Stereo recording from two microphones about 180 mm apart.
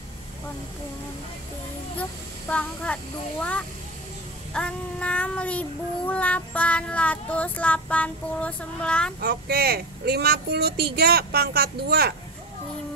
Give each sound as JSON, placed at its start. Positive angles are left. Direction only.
{"t": 2.0, "sound": "child singing", "side_deg": 5}
{"t": 9.2, "sound": "speech", "side_deg": -60}